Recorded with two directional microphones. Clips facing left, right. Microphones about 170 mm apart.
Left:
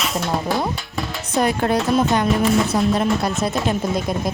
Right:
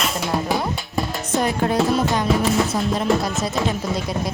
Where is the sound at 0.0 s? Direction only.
Centre (ahead or behind).